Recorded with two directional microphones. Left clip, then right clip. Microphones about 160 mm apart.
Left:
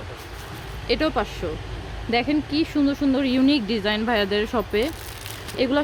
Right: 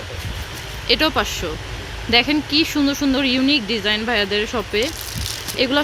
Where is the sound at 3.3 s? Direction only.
20° left (ahead or behind).